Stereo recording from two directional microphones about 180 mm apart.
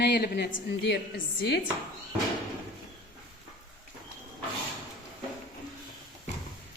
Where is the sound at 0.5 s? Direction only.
85° left.